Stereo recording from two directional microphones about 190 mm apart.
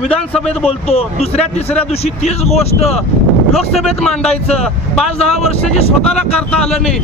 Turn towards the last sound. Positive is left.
turn(degrees=5)  # may be behind; listen again after turning